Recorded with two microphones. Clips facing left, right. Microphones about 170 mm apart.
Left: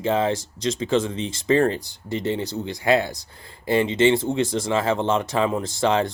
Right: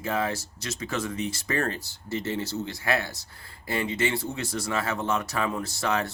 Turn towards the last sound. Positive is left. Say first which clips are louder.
# left 7 dB
turn(degrees=25)  # may be behind; listen again after turning